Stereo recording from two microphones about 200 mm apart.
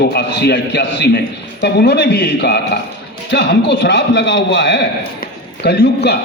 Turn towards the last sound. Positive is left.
turn(degrees=55)  # may be behind; listen again after turning